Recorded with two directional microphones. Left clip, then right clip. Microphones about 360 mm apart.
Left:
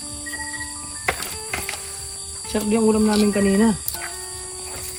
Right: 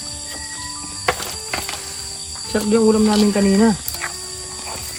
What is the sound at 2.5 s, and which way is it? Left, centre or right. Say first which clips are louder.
Speech: right 4 dB; centre.